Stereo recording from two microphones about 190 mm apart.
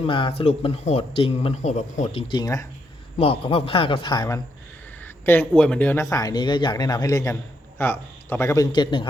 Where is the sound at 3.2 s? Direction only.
30° left (ahead or behind).